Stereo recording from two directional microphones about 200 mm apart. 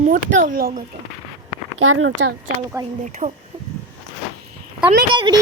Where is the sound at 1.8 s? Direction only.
90° right.